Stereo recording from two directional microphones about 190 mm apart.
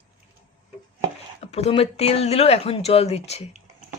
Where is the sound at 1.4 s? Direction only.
35° left (ahead or behind).